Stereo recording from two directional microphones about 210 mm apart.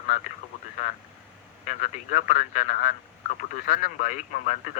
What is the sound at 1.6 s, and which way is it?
Speech, 35° left (ahead or behind).